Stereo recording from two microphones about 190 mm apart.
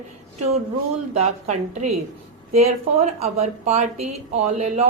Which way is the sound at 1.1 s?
35° right (ahead or behind).